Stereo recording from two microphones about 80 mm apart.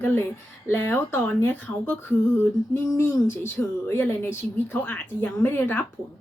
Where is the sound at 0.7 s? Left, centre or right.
Left.